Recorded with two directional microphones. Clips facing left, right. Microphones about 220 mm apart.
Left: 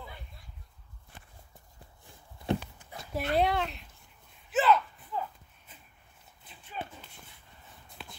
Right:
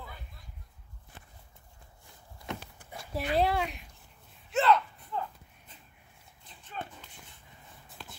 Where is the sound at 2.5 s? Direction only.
30° left (ahead or behind).